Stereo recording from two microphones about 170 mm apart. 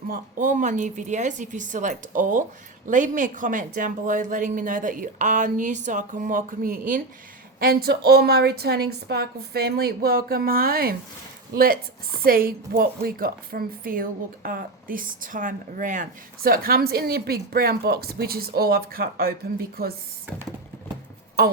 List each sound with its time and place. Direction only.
0.1 s a woman's voice: 50° right (ahead or behind)